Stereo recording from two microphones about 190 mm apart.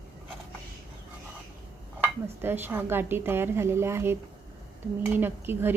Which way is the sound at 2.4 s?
10° right (ahead or behind).